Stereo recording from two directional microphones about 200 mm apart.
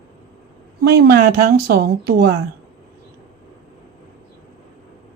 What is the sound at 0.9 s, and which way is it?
Speech, 50° right (ahead or behind).